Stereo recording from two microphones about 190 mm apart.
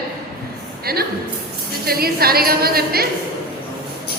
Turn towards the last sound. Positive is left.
turn(degrees=-55)  # may be behind; listen again after turning